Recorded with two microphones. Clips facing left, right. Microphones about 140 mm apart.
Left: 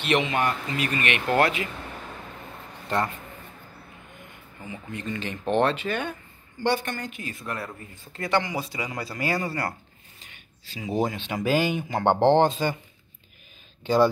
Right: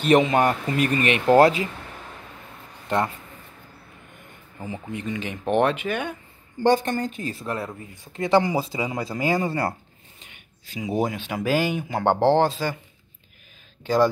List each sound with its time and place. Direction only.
0.0 s speech: 40° right (ahead or behind)
4.6 s speech: 40° right (ahead or behind)
5.0 s speech: 10° right (ahead or behind)
6.6 s speech: 40° right (ahead or behind)
7.8 s speech: 15° right (ahead or behind)
8.3 s speech: 30° right (ahead or behind)
10.7 s speech: 15° right (ahead or behind)